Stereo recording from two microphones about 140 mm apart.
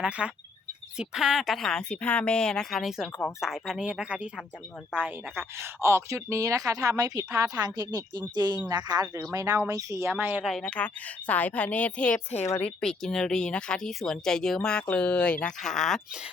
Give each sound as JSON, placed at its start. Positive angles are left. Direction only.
{"t": 0.0, "sound": "speech", "side_deg": -10}
{"t": 10.4, "sound": "speech", "side_deg": 5}
{"t": 12.8, "sound": "speech", "side_deg": 5}